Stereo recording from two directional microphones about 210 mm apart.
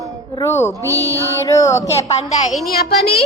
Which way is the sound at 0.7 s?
15° right (ahead or behind).